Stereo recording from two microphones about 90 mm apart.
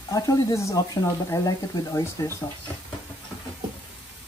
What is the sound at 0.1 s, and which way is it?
Speech, 45° left (ahead or behind).